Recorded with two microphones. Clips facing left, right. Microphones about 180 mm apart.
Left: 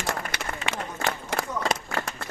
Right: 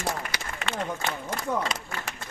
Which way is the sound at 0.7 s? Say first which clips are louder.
Right 2 dB; 80° left.